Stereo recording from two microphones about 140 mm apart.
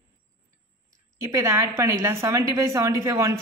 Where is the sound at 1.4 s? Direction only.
20° right (ahead or behind).